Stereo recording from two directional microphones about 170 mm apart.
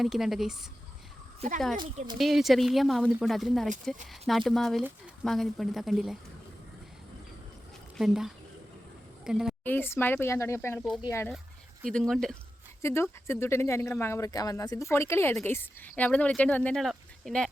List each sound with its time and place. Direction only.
0.0 s speech: centre (ahead or behind)
1.4 s speech: 50° right (ahead or behind)
2.1 s speech: centre (ahead or behind)
7.9 s a woman's voice: centre (ahead or behind)
9.6 s speech: 10° left (ahead or behind)
11.8 s speech: 5° left (ahead or behind)
12.8 s speech: 15° left (ahead or behind)